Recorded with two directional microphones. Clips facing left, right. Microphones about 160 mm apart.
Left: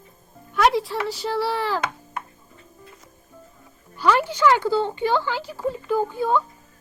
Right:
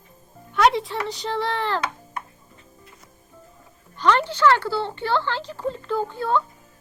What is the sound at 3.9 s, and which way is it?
Speech, 10° left (ahead or behind).